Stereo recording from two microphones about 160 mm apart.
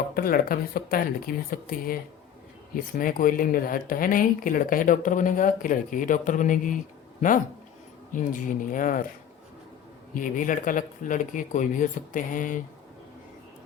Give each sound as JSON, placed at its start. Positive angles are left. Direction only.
{"t": 0.1, "sound": "speech", "side_deg": 65}
{"t": 8.1, "sound": "speech", "side_deg": 55}
{"t": 10.2, "sound": "speech", "side_deg": 55}